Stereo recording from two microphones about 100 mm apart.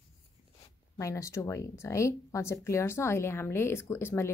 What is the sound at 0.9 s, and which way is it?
Speech, 30° left (ahead or behind).